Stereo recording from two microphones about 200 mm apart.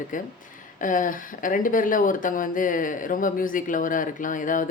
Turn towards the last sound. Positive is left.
turn(degrees=40)  # may be behind; listen again after turning